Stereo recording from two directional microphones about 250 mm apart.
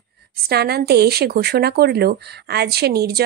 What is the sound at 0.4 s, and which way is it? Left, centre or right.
Speech, right.